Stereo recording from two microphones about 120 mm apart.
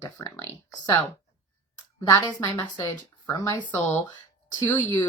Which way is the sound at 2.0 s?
25° left (ahead or behind).